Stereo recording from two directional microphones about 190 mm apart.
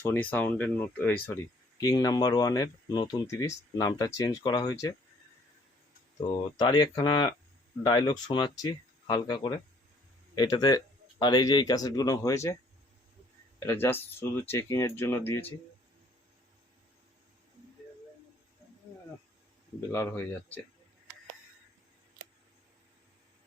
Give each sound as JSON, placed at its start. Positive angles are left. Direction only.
{"t": 0.0, "sound": "speech", "side_deg": 10}
{"t": 6.1, "sound": "speech", "side_deg": 20}
{"t": 13.7, "sound": "speech", "side_deg": 10}
{"t": 19.9, "sound": "speech", "side_deg": 10}